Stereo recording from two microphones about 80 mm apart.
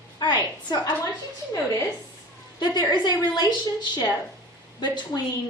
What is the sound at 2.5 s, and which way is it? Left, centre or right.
Speech, left.